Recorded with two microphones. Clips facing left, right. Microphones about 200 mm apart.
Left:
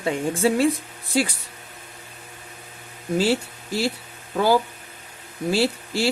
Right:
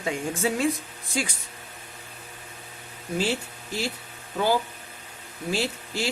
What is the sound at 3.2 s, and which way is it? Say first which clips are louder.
Speech: left 5 dB; 35° left (ahead or behind).